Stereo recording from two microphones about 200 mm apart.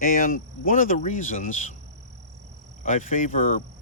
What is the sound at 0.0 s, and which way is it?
Speech, 45° left (ahead or behind).